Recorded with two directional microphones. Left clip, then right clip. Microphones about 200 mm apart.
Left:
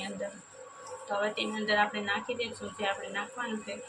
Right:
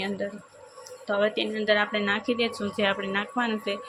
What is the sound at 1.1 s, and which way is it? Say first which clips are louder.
Speech: right 6 dB; 45° right (ahead or behind).